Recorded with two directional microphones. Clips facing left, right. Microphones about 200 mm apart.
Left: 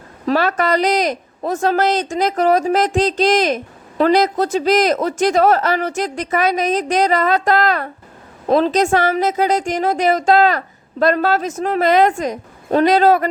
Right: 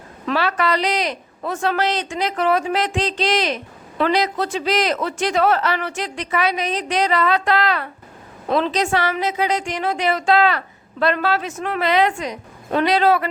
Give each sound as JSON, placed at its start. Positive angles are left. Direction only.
{"t": 0.3, "sound": "speech", "side_deg": 45}